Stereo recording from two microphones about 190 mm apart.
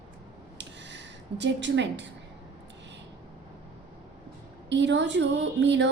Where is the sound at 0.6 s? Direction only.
70° right (ahead or behind).